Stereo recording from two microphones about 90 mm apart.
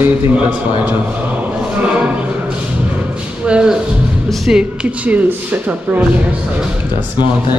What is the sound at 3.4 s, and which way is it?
Speech, 10° right (ahead or behind).